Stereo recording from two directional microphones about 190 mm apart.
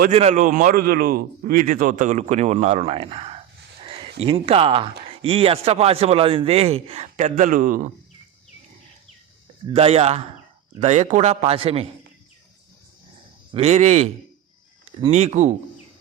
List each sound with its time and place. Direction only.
0.1 s speech: 35° right (ahead or behind)
3.8 s a sound: 30° right (ahead or behind)
4.2 s speech: 30° right (ahead or behind)
9.6 s speech: 30° right (ahead or behind)
13.5 s speech: 35° right (ahead or behind)
15.1 s speech: 35° right (ahead or behind)